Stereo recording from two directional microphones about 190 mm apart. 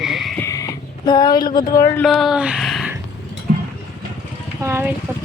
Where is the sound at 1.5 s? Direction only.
20° left (ahead or behind).